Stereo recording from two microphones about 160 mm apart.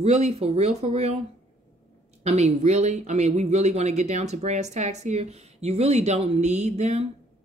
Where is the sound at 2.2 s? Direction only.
45° right (ahead or behind).